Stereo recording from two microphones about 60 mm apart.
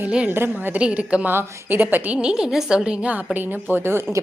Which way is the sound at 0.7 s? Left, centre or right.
Right.